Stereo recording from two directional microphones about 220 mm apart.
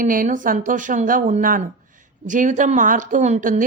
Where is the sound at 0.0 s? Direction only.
35° right (ahead or behind).